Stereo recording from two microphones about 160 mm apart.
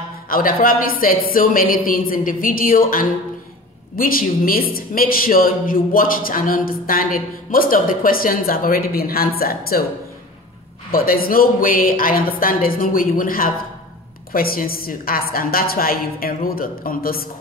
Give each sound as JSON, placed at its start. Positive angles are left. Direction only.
{"t": 0.3, "sound": "a woman's voice", "side_deg": 65}
{"t": 10.9, "sound": "a woman's voice", "side_deg": 65}